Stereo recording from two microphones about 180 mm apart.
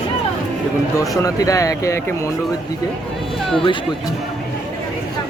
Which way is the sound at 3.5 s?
25° left (ahead or behind).